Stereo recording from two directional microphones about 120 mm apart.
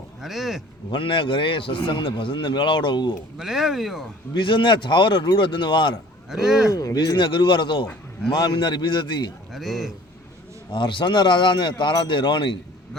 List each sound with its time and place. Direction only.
0.2 s speech: centre (ahead or behind)
0.9 s a man's voice: 45° left (ahead or behind)
3.3 s speech: 5° right (ahead or behind)
4.4 s a man's voice: 40° left (ahead or behind)
6.3 s speech: 5° right (ahead or behind)
6.7 s speech: 30° left (ahead or behind)
7.2 s a man's voice: 40° left (ahead or behind)
9.5 s speech: centre (ahead or behind)
10.7 s a man's voice: 40° left (ahead or behind)